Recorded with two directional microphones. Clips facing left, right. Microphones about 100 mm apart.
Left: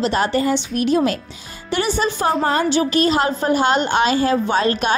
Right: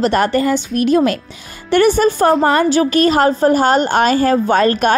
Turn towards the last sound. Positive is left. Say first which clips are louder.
# right 5 dB
turn(degrees=-50)  # may be behind; listen again after turning